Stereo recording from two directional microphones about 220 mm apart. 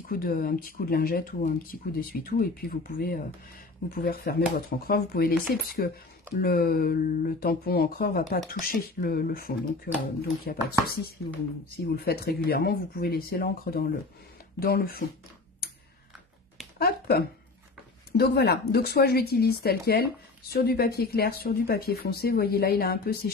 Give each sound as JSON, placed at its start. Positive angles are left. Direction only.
{"t": 0.1, "sound": "speech", "side_deg": 40}
{"t": 16.7, "sound": "speech", "side_deg": 45}